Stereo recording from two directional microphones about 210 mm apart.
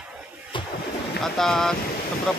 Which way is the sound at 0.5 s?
25° left (ahead or behind).